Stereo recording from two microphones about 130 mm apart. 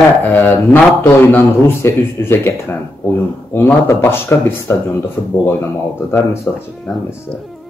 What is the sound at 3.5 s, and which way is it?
Speech, 20° left (ahead or behind).